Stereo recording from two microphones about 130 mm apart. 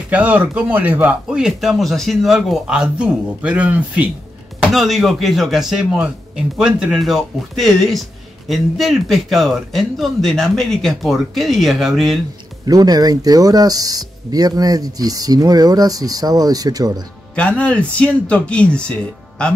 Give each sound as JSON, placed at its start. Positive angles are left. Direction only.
{"t": 0.1, "sound": "speech", "side_deg": -10}
{"t": 4.6, "sound": "speech", "side_deg": 0}
{"t": 12.6, "sound": "speech", "side_deg": -30}
{"t": 17.4, "sound": "speech", "side_deg": 10}